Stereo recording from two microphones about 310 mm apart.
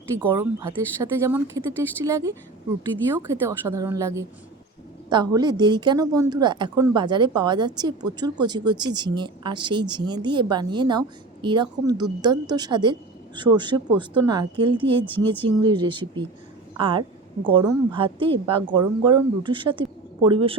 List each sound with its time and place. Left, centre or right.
0.2 s a woman's voice: centre